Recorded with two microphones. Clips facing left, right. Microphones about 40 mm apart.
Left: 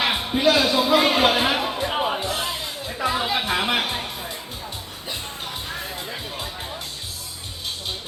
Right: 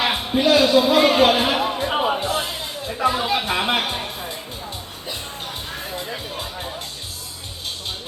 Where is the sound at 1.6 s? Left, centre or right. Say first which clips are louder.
Right 3 dB; centre.